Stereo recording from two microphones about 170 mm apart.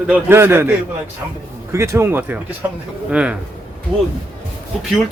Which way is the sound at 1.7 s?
15° right (ahead or behind).